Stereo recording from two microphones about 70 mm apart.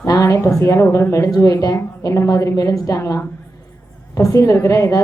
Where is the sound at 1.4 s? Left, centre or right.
Left.